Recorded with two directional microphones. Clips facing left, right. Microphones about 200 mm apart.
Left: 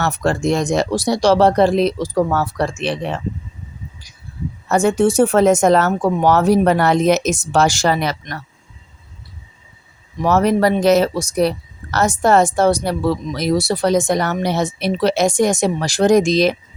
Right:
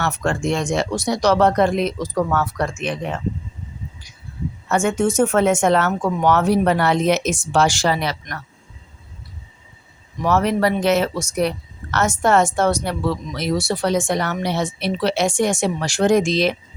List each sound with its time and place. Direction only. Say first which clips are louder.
0.0 s speech: left 3 dB; 35° left (ahead or behind)
4.7 s speech: left 4 dB; 35° left (ahead or behind)
8.2 s speech: left 3 dB; 30° left (ahead or behind)
10.2 s speech: left 3 dB; 40° left (ahead or behind)